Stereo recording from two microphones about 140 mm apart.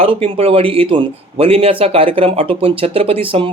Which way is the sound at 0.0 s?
45° right (ahead or behind).